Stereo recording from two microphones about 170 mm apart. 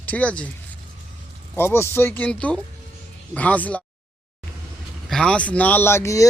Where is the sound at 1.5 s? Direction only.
15° left (ahead or behind).